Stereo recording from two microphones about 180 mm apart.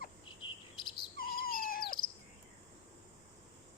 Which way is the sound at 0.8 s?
25° left (ahead or behind).